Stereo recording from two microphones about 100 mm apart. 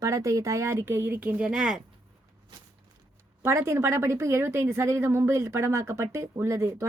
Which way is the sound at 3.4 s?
25° right (ahead or behind).